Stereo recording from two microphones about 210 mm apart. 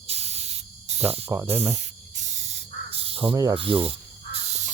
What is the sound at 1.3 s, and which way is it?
Speech, 10° right (ahead or behind).